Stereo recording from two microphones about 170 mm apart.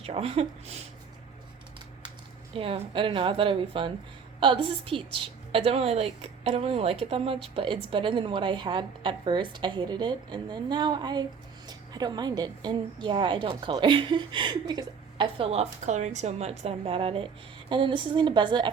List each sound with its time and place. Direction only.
0.0 s a woman's voice: 35° right (ahead or behind)
2.6 s a woman's voice: 30° right (ahead or behind)